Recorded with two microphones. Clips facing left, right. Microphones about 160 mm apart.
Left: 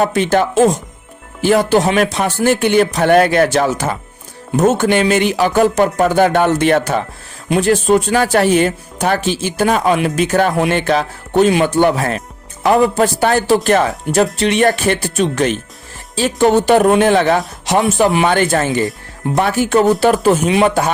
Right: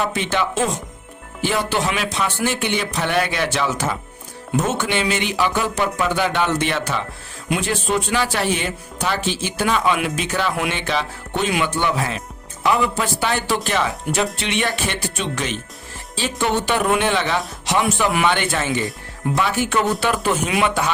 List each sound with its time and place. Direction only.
0.0 s speech: 45° left (ahead or behind)